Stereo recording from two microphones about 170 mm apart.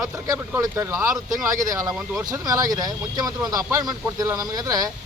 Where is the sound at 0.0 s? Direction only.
20° right (ahead or behind).